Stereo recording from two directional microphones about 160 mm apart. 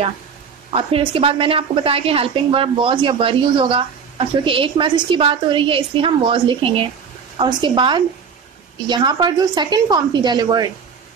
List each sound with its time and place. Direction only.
0.7 s a woman's voice: 35° right (ahead or behind)